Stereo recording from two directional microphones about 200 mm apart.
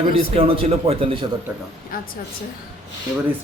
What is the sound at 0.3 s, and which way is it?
Speech, 25° right (ahead or behind).